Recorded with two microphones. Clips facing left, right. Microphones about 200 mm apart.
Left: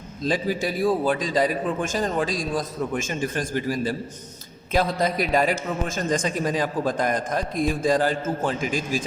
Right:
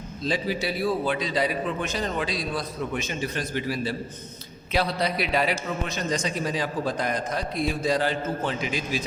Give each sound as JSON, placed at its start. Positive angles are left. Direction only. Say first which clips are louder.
{"t": 0.2, "sound": "a man's voice", "louder": "left 3 dB", "side_deg": 45}